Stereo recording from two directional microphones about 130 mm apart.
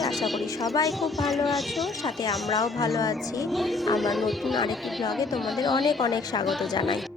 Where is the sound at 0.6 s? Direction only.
25° left (ahead or behind).